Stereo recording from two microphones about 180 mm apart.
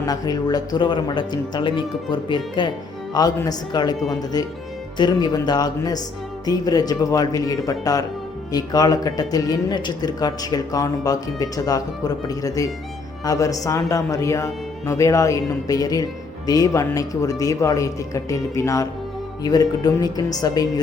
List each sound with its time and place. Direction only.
0.0 s a man's voice: 20° left (ahead or behind)